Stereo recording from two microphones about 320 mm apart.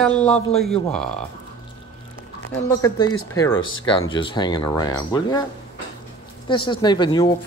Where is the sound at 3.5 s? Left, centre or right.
Left.